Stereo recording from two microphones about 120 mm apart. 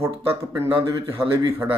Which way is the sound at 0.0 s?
20° right (ahead or behind).